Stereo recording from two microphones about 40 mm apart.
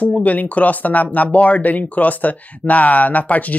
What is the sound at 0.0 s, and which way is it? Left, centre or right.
Speech, left.